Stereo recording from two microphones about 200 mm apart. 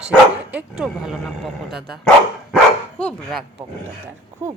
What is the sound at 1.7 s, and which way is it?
Speech, 50° right (ahead or behind).